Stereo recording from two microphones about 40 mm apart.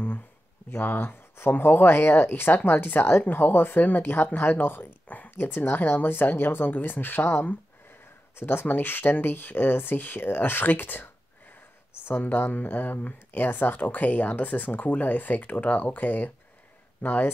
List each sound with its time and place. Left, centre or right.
0.7 s speech: left
1.6 s speech: left
3.3 s speech: left
5.4 s speech: left
8.4 s speech: left
8.6 s speech: left
12.3 s speech: left